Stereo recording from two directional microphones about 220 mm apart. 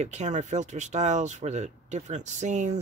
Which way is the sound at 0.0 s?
30° right (ahead or behind).